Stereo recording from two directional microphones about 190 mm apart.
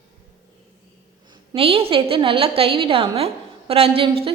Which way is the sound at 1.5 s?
30° right (ahead or behind).